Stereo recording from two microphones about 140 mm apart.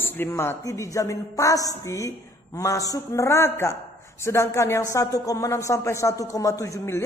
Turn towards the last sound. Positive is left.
turn(degrees=20)  # may be behind; listen again after turning